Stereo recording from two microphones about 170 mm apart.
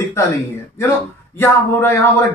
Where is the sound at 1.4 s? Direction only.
15° left (ahead or behind).